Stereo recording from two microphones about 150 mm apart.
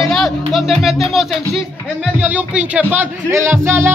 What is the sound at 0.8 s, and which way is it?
Speech, centre (ahead or behind).